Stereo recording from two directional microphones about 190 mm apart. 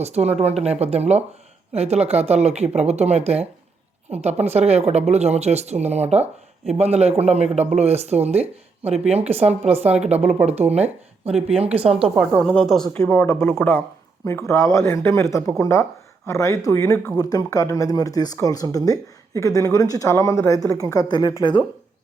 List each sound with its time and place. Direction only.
0.0 s speech: 35° right (ahead or behind)
12.0 s speech: centre (ahead or behind); by 21.3 s 20° left (ahead or behind)